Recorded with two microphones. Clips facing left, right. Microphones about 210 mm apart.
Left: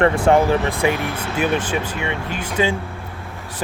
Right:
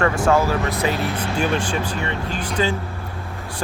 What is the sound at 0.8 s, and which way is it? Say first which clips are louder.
Speech: left 2 dB; 10° left (ahead or behind).